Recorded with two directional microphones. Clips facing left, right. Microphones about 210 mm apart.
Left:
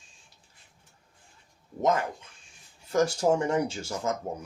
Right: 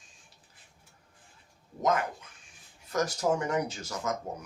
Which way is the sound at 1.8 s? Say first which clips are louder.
Left 2 dB; 25° left (ahead or behind).